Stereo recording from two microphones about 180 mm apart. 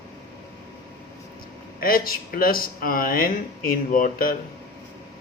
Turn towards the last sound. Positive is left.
turn(degrees=50)  # may be behind; listen again after turning